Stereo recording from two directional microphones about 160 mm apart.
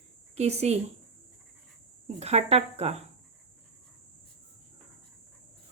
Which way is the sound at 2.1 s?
40° right (ahead or behind).